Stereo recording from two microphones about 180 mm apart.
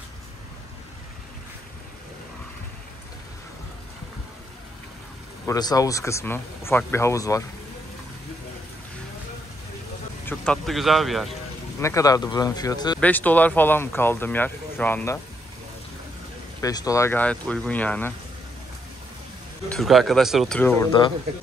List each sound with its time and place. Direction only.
5.5 s speech: 20° left (ahead or behind)
10.2 s speech: 5° left (ahead or behind)
11.8 s speech: 20° left (ahead or behind)
13.0 s speech: 10° left (ahead or behind)
16.6 s speech: 20° left (ahead or behind)
19.7 s speech: centre (ahead or behind)